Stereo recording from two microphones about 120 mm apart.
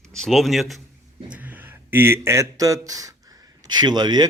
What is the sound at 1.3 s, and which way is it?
Speech, 15° right (ahead or behind).